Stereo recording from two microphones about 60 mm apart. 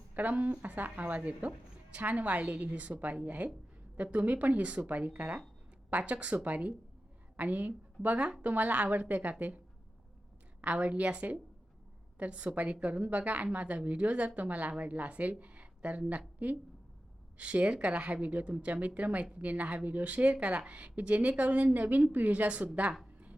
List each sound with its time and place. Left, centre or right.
0.1 s a woman's voice: right
10.6 s a woman's voice: right